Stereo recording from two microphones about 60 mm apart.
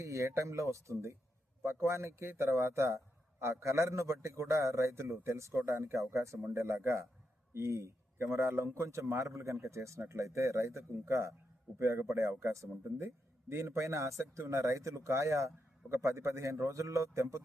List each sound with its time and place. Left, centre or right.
0.0 s a man's voice: right